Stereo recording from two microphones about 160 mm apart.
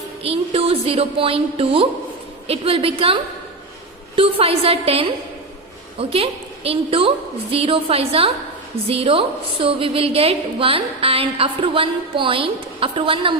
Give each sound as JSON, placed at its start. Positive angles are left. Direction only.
{"t": 0.2, "sound": "a woman's voice", "side_deg": -35}